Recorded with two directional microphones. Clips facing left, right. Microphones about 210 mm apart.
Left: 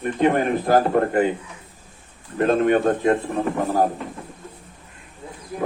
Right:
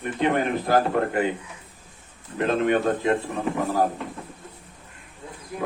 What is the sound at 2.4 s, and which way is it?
Speech, 45° left (ahead or behind).